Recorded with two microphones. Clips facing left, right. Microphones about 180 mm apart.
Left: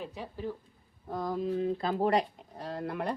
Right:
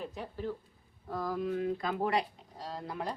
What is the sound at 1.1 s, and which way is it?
Speech, 20° left (ahead or behind).